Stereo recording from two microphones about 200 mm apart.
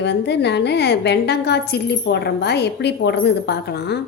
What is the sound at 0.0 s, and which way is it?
Speech, 60° left (ahead or behind).